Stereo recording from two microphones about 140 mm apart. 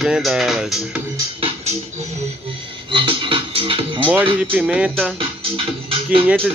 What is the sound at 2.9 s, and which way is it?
Music, 40° right (ahead or behind).